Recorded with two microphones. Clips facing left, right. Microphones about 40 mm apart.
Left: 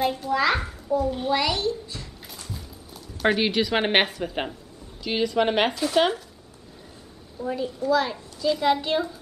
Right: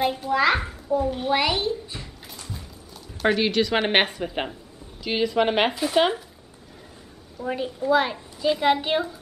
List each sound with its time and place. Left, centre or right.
0.0 s a child's voice: centre
3.3 s a woman's voice: centre
7.4 s a child's voice: right